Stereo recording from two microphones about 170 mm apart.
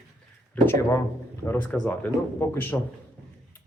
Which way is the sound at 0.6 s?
15° left (ahead or behind).